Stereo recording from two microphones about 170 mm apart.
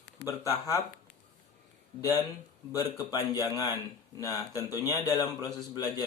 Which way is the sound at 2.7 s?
20° left (ahead or behind).